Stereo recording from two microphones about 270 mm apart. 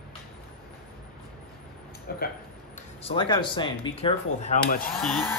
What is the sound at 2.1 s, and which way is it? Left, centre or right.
Speech, left.